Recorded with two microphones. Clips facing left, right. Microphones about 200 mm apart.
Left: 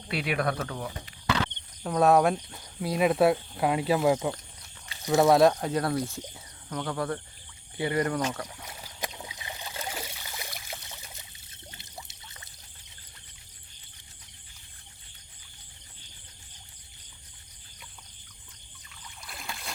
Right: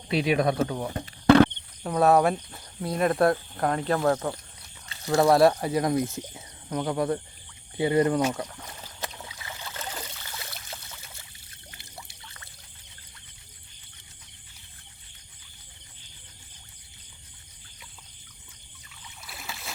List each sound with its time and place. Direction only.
0.1 s speech: 20° right (ahead or behind)
0.9 s a sound: 55° right (ahead or behind)
1.8 s speech: centre (ahead or behind)
4.9 s a sound: 15° left (ahead or behind)
5.2 s speech: centre (ahead or behind); by 8.2 s 25° right (ahead or behind)
8.2 s speech: 10° right (ahead or behind)
8.4 s boat: 10° left (ahead or behind)
11.7 s pour: 20° left (ahead or behind)
19.0 s boat: 5° right (ahead or behind)